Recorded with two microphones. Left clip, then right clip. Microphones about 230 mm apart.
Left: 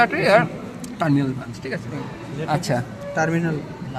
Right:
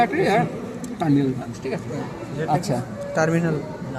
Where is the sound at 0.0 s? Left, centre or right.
Left.